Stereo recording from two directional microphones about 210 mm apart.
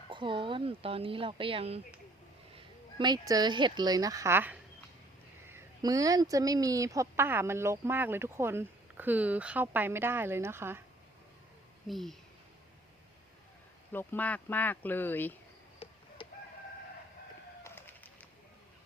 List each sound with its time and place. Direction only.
0.1 s speech: 25° right (ahead or behind)
3.0 s a woman's voice: 20° right (ahead or behind)
11.9 s speech: centre (ahead or behind)
13.9 s speech: 10° left (ahead or behind)
15.8 s chicken: 30° left (ahead or behind)
17.6 s bird: 10° left (ahead or behind)